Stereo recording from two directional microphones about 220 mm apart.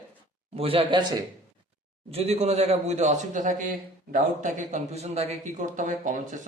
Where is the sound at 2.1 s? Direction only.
30° right (ahead or behind).